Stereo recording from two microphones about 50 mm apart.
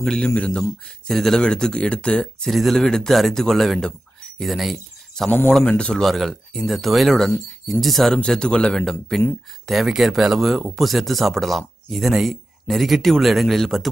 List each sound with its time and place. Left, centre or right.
0.0 s speech: centre
0.6 s speech: centre; by 2.2 s left
2.4 s speech: centre
5.2 s speech: centre
6.0 s speech: centre
8.3 s speech: centre
9.7 s speech: centre